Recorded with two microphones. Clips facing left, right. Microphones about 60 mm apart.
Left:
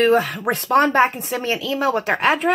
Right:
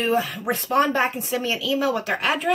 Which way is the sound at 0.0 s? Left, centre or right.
Left.